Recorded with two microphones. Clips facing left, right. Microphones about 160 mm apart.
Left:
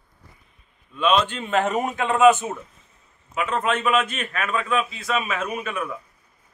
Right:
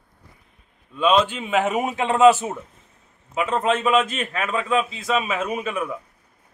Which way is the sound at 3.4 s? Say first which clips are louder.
Right 2 dB; 30° right (ahead or behind).